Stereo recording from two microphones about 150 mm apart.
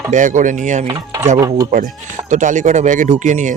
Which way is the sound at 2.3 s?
55° right (ahead or behind).